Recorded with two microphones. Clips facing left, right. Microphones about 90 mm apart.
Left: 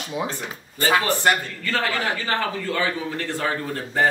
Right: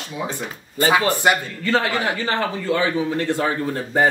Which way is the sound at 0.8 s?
15° right (ahead or behind).